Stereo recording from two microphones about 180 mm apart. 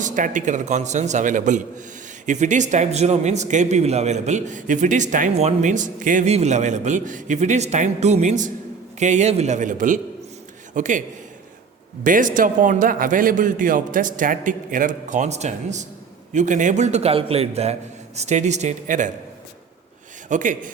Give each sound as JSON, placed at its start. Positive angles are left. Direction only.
{"t": 0.0, "sound": "a man's voice", "side_deg": -45}
{"t": 12.0, "sound": "a man's voice", "side_deg": -45}
{"t": 20.2, "sound": "a man's voice", "side_deg": -45}